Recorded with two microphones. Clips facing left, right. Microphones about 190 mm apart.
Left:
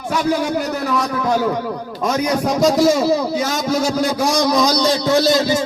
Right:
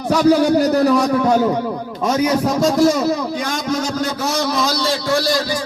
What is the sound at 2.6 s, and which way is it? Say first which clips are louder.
A man's voice: left 2 dB; centre (ahead or behind).